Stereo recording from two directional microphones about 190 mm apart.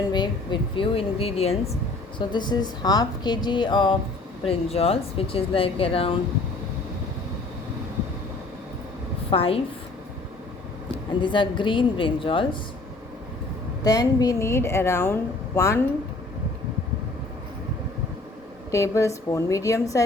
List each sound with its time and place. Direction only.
0.0 s speech: 25° left (ahead or behind)
9.3 s speech: 30° left (ahead or behind)
11.2 s speech: 25° left (ahead or behind)
13.8 s a woman's voice: 20° left (ahead or behind)
18.7 s a woman's voice: 15° left (ahead or behind)